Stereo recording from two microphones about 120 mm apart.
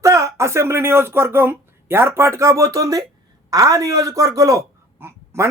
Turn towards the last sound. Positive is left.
turn(degrees=-20)  # may be behind; listen again after turning